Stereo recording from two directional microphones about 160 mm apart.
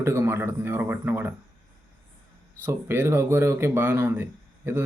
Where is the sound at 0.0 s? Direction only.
15° right (ahead or behind).